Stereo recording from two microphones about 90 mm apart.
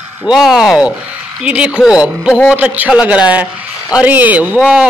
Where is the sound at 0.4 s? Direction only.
5° right (ahead or behind).